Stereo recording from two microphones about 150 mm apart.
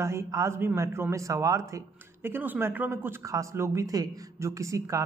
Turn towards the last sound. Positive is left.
turn(degrees=-20)  # may be behind; listen again after turning